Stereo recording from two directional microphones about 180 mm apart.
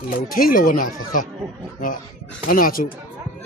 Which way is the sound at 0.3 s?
50° left (ahead or behind).